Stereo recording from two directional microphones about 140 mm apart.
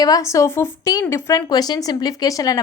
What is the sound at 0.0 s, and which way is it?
Speech, 25° left (ahead or behind).